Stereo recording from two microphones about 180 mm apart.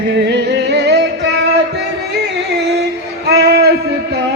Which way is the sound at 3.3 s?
65° right (ahead or behind).